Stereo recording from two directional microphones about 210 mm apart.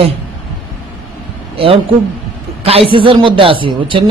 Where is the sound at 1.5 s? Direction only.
25° right (ahead or behind).